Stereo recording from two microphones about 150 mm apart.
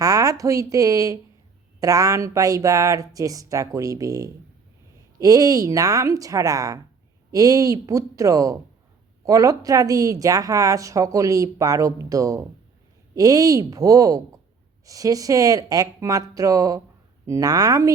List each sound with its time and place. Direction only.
0.0 s a woman's voice: 25° right (ahead or behind)